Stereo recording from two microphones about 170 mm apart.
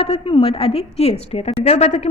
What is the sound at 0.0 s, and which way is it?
A woman's voice, 35° left (ahead or behind).